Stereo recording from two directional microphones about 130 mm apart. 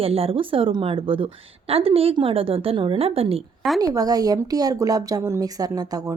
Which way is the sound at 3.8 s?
30° right (ahead or behind).